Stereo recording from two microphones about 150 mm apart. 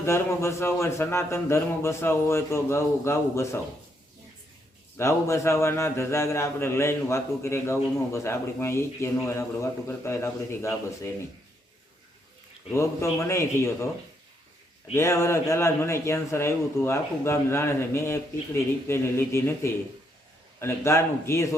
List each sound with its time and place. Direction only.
0.0 s a man's voice: 15° left (ahead or behind)
4.9 s a man's voice: 20° left (ahead or behind)
12.7 s a man's voice: 20° left (ahead or behind)
14.9 s a man's voice: 20° left (ahead or behind)